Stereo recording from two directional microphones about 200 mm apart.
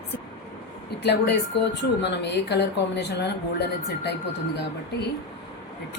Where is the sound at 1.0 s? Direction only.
55° left (ahead or behind).